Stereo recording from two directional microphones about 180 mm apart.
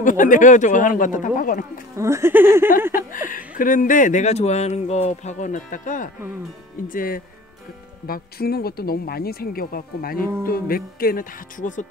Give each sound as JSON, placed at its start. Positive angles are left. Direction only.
{"t": 0.0, "sound": "speech", "side_deg": 45}
{"t": 2.0, "sound": "speech", "side_deg": -15}
{"t": 2.9, "sound": "speech", "side_deg": 50}